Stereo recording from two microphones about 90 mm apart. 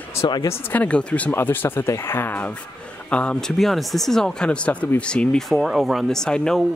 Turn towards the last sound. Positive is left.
turn(degrees=5)  # may be behind; listen again after turning